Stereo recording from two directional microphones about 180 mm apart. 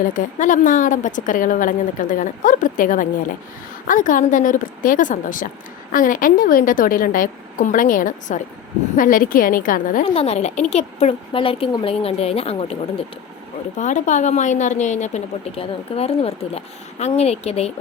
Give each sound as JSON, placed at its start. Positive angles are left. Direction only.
{"t": 0.1, "sound": "a woman's voice", "side_deg": 45}
{"t": 10.2, "sound": "a woman's voice", "side_deg": 35}
{"t": 13.7, "sound": "a woman's voice", "side_deg": 40}